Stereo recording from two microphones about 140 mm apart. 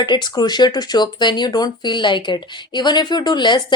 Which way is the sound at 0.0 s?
30° left (ahead or behind).